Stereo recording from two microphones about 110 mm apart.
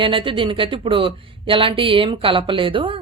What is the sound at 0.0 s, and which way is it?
Speech, 50° right (ahead or behind).